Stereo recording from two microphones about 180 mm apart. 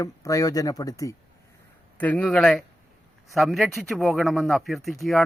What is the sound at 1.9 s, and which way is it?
Speech, 10° left (ahead or behind).